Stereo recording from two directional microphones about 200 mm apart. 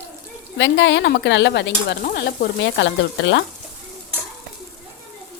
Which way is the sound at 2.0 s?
45° left (ahead or behind).